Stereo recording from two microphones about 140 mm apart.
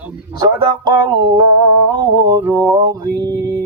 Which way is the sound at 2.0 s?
25° right (ahead or behind).